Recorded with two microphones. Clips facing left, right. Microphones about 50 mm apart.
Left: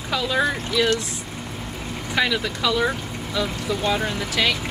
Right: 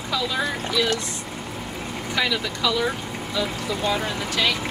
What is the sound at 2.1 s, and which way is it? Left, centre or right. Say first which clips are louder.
Speech: left 3 dB; left.